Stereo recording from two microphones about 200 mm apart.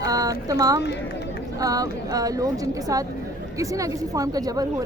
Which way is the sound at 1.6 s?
20° right (ahead or behind).